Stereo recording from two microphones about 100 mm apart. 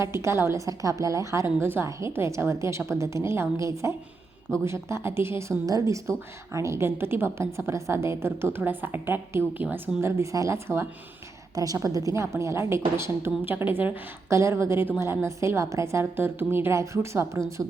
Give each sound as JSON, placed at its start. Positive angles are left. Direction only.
{"t": 0.0, "sound": "a woman's voice", "side_deg": -30}
{"t": 11.5, "sound": "a woman's voice", "side_deg": -35}
{"t": 14.3, "sound": "a woman's voice", "side_deg": -30}